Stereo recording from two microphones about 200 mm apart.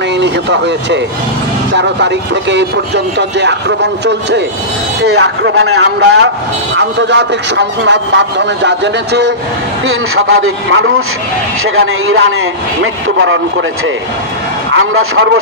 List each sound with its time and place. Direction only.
0.2 s speech: 60° right (ahead or behind)
9.8 s a man's voice: 90° right; by 13.7 s 70° right (ahead or behind)
14.7 s a man's voice: 75° right (ahead or behind)